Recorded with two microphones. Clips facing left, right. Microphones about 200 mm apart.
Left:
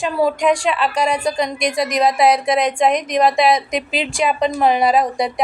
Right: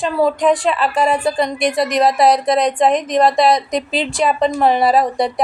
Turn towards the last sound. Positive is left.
turn(degrees=0)  # may be behind; listen again after turning